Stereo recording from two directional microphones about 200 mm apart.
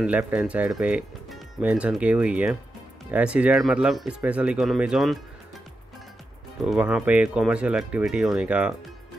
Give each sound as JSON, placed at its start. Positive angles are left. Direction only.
{"t": 0.0, "sound": "speech", "side_deg": -5}
{"t": 6.6, "sound": "speech", "side_deg": -5}